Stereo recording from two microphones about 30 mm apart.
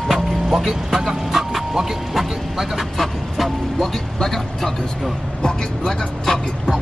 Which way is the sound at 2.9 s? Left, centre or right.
Centre.